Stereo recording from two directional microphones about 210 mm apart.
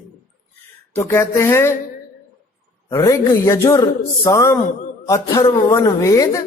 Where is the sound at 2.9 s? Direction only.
15° left (ahead or behind).